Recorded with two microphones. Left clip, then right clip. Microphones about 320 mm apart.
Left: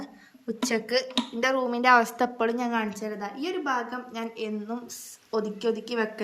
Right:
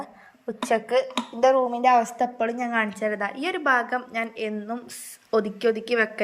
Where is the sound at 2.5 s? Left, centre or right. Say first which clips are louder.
Right 3 dB; centre.